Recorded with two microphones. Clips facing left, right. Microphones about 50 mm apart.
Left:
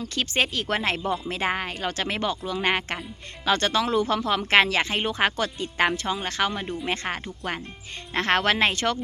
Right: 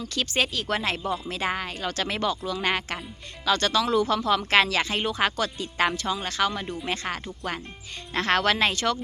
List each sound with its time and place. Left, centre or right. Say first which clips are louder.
0.1 s speech: left 1 dB; left